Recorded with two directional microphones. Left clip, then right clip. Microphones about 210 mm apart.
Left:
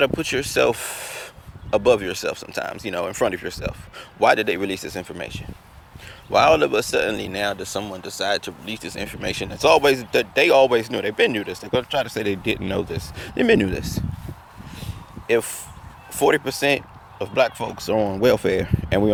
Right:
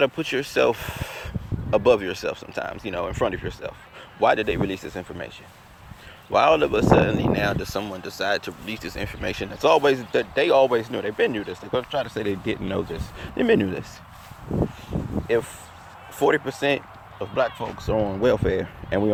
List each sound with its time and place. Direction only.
0.0 s speech: 15° left (ahead or behind)
14.8 s a sound: 30° left (ahead or behind)
16.1 s speech: 25° left (ahead or behind)